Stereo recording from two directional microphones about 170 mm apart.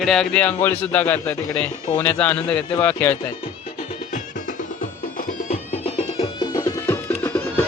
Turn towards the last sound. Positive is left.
turn(degrees=10)  # may be behind; listen again after turning